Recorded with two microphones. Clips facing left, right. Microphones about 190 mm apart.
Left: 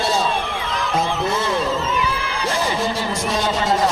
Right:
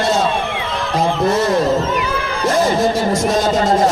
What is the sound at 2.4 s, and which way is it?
Music, 45° right (ahead or behind).